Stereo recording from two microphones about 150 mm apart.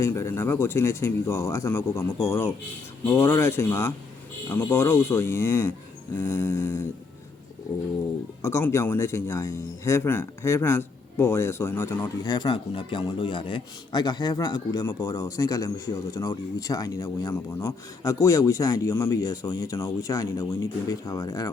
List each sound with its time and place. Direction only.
0.0 s a man's voice: 15° left (ahead or behind)
8.4 s a man's voice: 20° left (ahead or behind)